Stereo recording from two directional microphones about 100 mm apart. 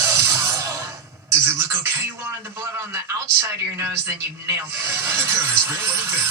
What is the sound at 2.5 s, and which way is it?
Speech, 25° right (ahead or behind).